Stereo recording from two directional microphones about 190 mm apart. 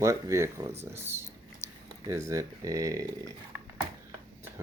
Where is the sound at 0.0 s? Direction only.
15° right (ahead or behind).